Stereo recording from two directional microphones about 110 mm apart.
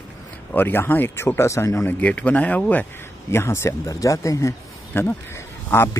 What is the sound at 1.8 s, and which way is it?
Speech, 15° left (ahead or behind).